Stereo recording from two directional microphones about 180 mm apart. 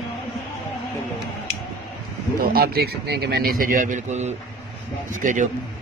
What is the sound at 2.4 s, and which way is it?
A man's voice, 55° right (ahead or behind).